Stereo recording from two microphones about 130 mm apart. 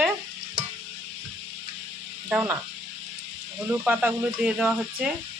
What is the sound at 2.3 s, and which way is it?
Speech, 15° right (ahead or behind).